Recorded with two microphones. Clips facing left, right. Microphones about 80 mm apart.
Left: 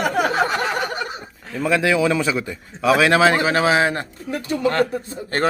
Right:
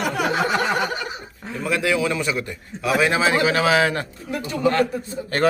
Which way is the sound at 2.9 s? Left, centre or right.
Left.